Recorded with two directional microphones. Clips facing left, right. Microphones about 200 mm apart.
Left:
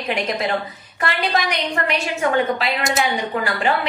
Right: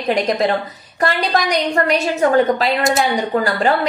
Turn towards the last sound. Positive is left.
turn(degrees=-40)  # may be behind; listen again after turning